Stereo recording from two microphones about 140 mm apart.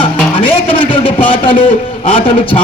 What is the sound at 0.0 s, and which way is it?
Music, 40° left (ahead or behind).